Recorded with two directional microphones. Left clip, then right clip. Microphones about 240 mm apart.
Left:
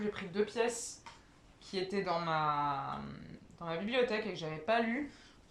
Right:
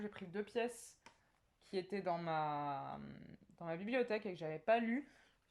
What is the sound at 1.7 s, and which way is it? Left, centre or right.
Speech, right.